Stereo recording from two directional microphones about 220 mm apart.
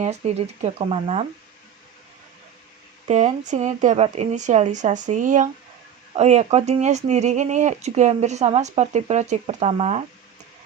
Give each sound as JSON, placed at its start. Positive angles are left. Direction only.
{"t": 0.2, "sound": "speech", "side_deg": -30}
{"t": 3.1, "sound": "speech", "side_deg": -30}